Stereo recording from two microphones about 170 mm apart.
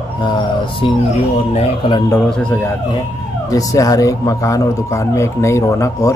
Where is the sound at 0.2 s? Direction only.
30° left (ahead or behind).